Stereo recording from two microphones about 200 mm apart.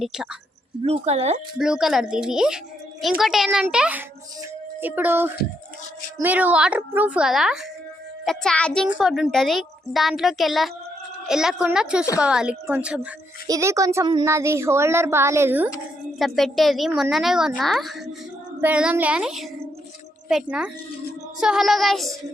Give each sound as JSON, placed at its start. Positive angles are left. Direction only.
{"t": 0.0, "sound": "a child's voice", "side_deg": 0}
{"t": 0.9, "sound": "speech", "side_deg": -30}
{"t": 1.5, "sound": "a child's voice", "side_deg": -5}
{"t": 16.1, "sound": "a child's voice", "side_deg": 0}